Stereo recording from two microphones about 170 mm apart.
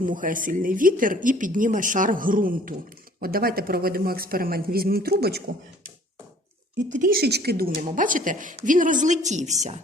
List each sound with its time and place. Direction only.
0.0 s speech: 50° right (ahead or behind); by 5.4 s 65° right (ahead or behind)
7.0 s speech: 65° right (ahead or behind); by 9.8 s 40° right (ahead or behind)